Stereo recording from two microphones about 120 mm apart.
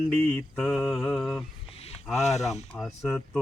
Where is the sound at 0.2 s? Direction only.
10° left (ahead or behind).